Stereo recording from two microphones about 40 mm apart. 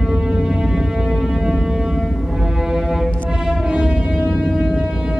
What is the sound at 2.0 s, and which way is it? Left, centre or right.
Music, centre.